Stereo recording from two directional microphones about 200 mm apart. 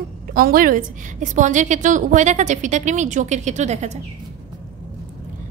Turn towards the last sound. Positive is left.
turn(degrees=-35)  # may be behind; listen again after turning